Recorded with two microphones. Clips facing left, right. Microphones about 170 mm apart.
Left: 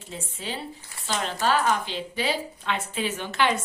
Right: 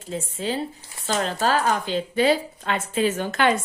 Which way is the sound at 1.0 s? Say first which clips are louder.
Right 3 dB; 40° right (ahead or behind).